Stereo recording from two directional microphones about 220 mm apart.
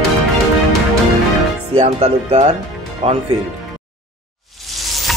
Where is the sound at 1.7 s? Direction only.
25° right (ahead or behind).